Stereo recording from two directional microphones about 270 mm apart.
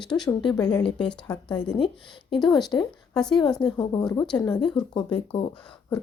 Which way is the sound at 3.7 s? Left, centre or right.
Centre.